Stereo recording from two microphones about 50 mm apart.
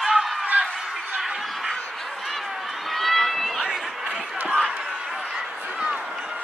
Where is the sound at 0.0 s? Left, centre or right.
Centre.